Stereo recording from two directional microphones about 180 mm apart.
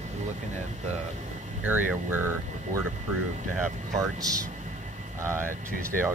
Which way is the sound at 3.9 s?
20° right (ahead or behind).